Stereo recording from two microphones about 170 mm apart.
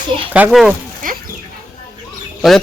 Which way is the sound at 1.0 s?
50° right (ahead or behind).